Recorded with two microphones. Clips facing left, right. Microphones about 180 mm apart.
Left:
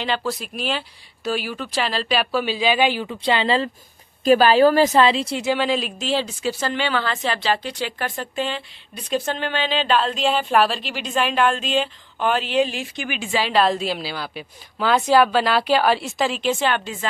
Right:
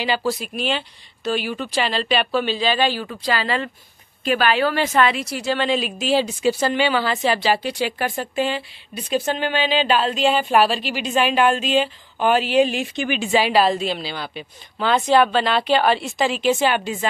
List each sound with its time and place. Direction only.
0.0 s a woman's voice: 5° right (ahead or behind); by 3.2 s 15° left (ahead or behind)
3.2 s a woman's voice: 25° left (ahead or behind)
5.6 s speech: centre (ahead or behind); by 13.4 s 25° right (ahead or behind)
13.7 s a woman's voice: centre (ahead or behind)